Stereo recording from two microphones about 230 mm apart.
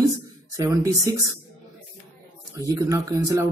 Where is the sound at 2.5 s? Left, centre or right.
Centre.